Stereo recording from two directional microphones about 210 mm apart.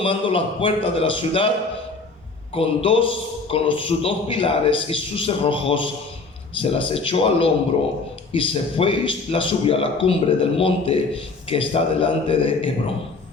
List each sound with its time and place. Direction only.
0.0 s a man's voice: 25° left (ahead or behind)
2.6 s a man's voice: 25° left (ahead or behind)